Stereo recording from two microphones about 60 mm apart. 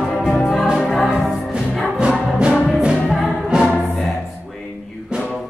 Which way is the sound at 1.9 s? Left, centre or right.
Centre.